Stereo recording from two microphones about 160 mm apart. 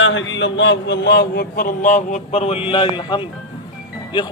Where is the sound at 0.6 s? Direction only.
90° left.